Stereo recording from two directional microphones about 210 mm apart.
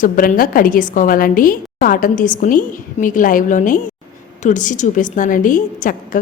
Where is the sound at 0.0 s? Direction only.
40° left (ahead or behind).